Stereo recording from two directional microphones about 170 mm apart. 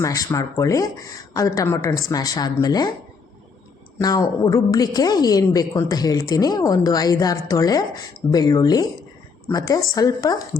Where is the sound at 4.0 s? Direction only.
20° left (ahead or behind).